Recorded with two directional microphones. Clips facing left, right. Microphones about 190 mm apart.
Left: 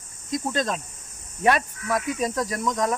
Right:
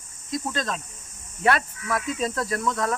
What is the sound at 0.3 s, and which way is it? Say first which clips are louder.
Speech: left 3 dB; 20° left (ahead or behind).